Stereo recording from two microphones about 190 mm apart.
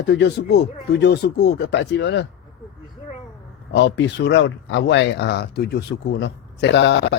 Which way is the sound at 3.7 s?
70° left (ahead or behind).